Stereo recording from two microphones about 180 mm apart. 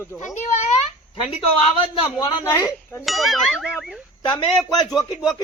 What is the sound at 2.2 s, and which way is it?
Speech, 20° left (ahead or behind).